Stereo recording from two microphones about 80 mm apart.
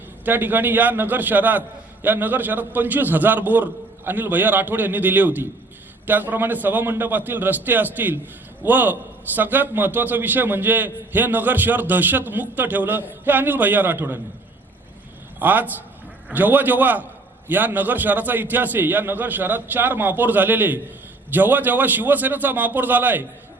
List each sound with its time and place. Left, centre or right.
0.3 s a man's voice: right
15.4 s a man's voice: right